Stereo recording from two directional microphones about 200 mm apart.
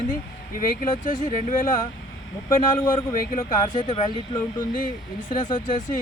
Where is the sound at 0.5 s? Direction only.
40° left (ahead or behind).